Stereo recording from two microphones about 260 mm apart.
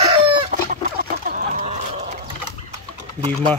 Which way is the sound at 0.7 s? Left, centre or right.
Right.